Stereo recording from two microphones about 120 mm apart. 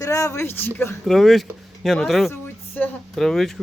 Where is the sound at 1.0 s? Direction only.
Centre (ahead or behind).